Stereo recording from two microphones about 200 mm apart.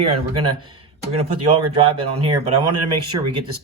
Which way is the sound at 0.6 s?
25° right (ahead or behind).